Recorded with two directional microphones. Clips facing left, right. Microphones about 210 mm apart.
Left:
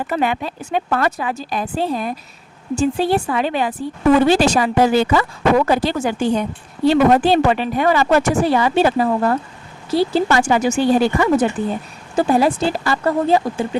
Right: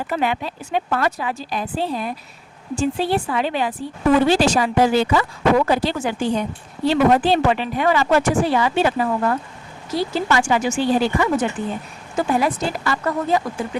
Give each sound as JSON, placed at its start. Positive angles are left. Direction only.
{"t": 0.1, "sound": "speech", "side_deg": 50}
{"t": 12.1, "sound": "speech", "side_deg": 30}